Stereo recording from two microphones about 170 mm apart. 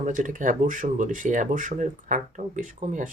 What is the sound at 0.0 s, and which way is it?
Speech, 50° right (ahead or behind).